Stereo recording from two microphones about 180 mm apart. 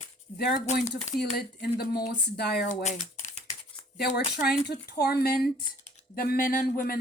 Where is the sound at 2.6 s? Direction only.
45° left (ahead or behind).